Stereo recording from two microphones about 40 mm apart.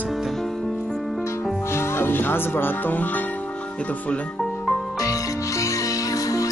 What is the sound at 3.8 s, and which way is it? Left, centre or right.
Speech, left.